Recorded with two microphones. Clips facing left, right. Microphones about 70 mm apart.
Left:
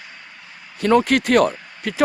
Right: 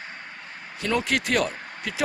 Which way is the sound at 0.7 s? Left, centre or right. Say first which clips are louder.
Left 9 dB; left.